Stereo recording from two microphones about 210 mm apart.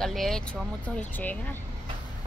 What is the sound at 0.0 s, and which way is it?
Speech, centre (ahead or behind).